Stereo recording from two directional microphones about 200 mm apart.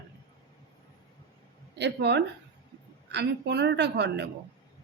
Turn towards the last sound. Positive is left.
turn(degrees=-60)  # may be behind; listen again after turning